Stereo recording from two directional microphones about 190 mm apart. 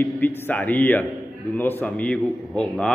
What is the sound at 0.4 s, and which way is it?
A man's voice, 10° left (ahead or behind).